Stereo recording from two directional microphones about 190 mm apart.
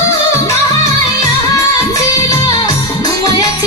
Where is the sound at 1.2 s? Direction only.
20° left (ahead or behind).